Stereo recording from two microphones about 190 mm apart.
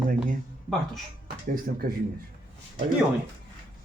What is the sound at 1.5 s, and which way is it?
Speech, 50° right (ahead or behind).